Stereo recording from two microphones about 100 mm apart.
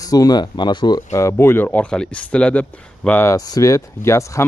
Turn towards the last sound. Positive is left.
turn(degrees=30)  # may be behind; listen again after turning